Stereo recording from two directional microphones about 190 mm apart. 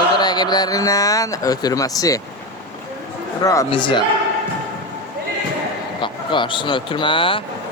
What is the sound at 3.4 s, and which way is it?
Speech, 20° left (ahead or behind).